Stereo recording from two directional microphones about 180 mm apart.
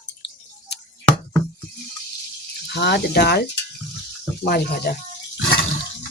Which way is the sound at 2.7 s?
65° left (ahead or behind).